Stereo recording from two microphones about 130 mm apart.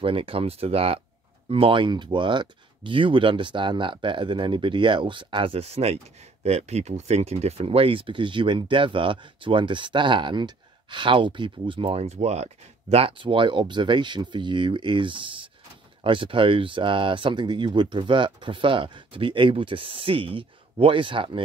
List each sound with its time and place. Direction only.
0.0 s speech: 45° right (ahead or behind)
12.9 s speech: 45° right (ahead or behind)